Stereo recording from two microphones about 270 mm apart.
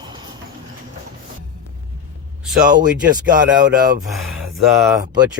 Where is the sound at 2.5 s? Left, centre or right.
Right.